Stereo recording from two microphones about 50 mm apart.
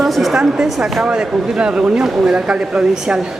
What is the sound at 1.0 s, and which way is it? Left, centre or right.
A man's voice, centre.